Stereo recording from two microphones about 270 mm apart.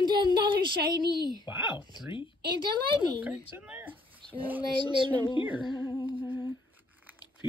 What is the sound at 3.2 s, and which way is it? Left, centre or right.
Speech, centre.